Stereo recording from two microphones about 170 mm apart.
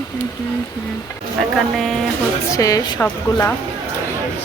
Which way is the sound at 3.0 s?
10° left (ahead or behind).